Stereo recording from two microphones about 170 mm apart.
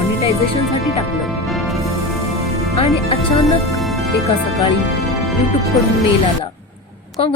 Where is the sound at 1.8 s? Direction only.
20° right (ahead or behind).